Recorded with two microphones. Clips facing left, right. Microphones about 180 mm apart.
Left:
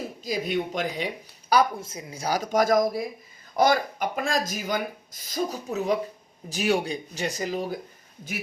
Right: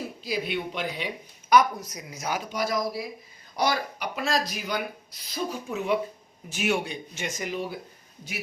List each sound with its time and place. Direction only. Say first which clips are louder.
0.3 s speech: left 3 dB; 45° left (ahead or behind)